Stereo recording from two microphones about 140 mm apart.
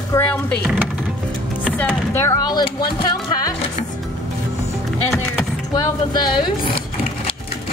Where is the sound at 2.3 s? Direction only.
30° left (ahead or behind).